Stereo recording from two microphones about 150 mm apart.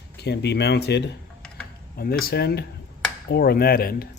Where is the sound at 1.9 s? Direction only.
90° left.